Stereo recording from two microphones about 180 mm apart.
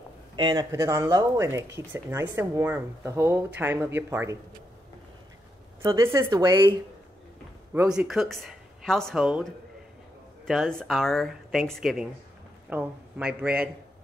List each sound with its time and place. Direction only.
0.4 s speech: 25° right (ahead or behind)
5.8 s speech: 15° right (ahead or behind)
7.7 s speech: 10° right (ahead or behind)